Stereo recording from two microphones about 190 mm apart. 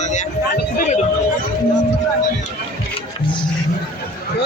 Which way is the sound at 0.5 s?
50° left (ahead or behind).